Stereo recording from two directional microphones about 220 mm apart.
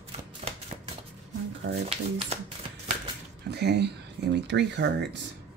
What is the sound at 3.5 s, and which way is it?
Speech, 50° right (ahead or behind).